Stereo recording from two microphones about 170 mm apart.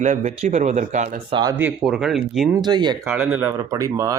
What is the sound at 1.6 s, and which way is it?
Speech, 5° right (ahead or behind).